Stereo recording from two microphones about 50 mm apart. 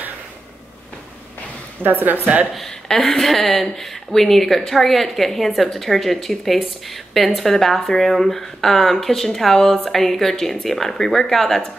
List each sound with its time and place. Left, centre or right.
1.8 s a woman's voice: right
2.5 s a woman's voice: centre